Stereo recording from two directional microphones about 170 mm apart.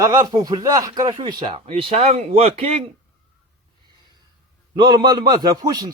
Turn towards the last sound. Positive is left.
turn(degrees=-20)  # may be behind; listen again after turning